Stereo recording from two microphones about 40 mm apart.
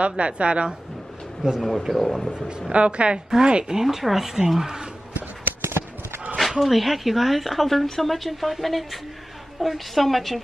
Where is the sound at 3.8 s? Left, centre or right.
Centre.